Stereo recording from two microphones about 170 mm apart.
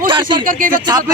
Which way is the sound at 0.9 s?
20° right (ahead or behind).